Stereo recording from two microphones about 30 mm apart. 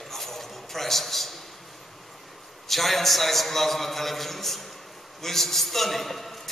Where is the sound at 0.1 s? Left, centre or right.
Centre.